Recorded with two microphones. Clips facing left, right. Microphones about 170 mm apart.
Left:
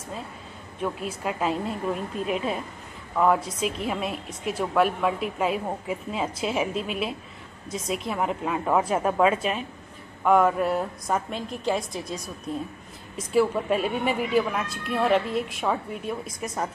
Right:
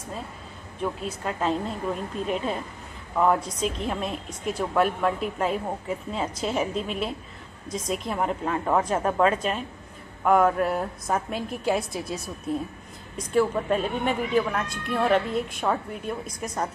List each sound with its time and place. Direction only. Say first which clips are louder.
0.7 s a woman's voice: even; 5° left (ahead or behind)
13.2 s a woman's voice: left 1 dB; 5° left (ahead or behind)